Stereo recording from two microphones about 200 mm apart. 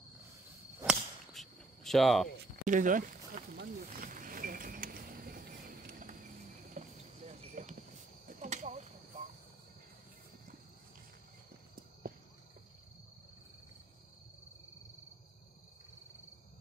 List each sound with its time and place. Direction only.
0.8 s whip: centre (ahead or behind)
2.3 s a sound: 45° right (ahead or behind)
8.3 s cricket: 40° right (ahead or behind)